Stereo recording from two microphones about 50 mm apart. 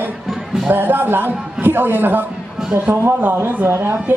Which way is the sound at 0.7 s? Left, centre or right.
Right.